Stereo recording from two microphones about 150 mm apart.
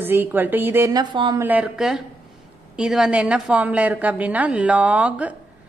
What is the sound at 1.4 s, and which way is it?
A woman's voice, 10° right (ahead or behind).